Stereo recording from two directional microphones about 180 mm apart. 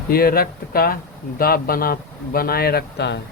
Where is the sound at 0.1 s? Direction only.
55° left (ahead or behind).